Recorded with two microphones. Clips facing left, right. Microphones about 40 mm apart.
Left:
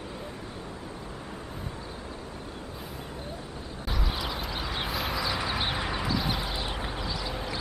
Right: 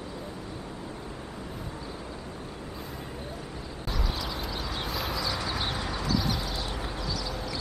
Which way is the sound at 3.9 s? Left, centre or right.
Centre.